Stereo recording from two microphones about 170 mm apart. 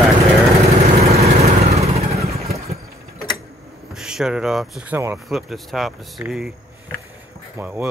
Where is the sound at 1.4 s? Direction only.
40° right (ahead or behind).